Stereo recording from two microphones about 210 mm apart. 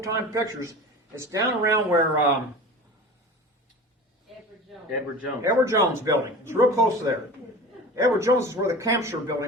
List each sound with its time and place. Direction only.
0.0 s speech: 15° right (ahead or behind)
5.4 s speech: 15° right (ahead or behind)